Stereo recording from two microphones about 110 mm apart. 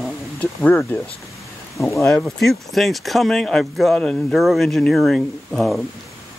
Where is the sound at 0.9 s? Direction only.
15° left (ahead or behind).